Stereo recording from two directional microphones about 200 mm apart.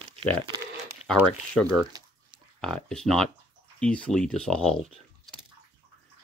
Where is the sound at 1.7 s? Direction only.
20° right (ahead or behind).